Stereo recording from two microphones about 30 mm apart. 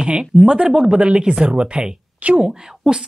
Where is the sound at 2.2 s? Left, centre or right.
Right.